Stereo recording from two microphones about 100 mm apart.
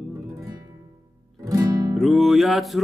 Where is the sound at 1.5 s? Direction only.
40° right (ahead or behind).